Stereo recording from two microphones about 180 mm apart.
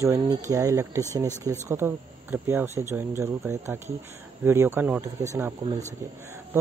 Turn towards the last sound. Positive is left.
turn(degrees=-10)  # may be behind; listen again after turning